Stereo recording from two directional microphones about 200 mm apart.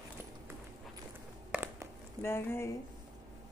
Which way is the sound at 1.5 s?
10° right (ahead or behind).